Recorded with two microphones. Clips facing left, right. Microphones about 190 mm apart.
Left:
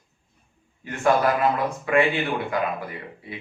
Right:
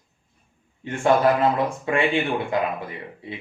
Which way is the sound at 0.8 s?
25° right (ahead or behind).